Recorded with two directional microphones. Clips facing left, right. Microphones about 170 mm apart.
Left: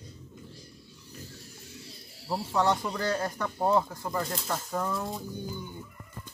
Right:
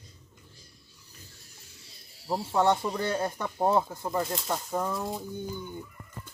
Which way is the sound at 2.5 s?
25° right (ahead or behind).